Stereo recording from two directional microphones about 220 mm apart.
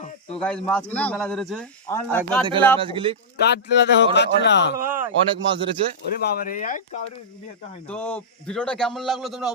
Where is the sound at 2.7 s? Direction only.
25° right (ahead or behind).